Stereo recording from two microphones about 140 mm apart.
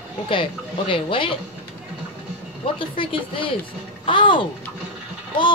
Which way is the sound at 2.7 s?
35° left (ahead or behind).